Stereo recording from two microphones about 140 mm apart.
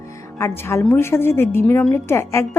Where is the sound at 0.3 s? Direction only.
20° left (ahead or behind).